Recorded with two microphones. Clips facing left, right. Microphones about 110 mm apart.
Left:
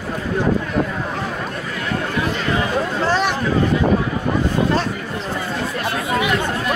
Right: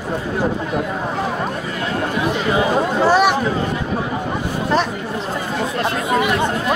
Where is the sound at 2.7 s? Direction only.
15° right (ahead or behind).